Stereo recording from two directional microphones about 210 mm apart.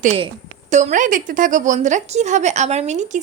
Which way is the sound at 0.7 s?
35° right (ahead or behind).